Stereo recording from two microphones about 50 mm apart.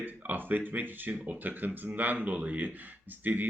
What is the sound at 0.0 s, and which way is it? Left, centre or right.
Speech, right.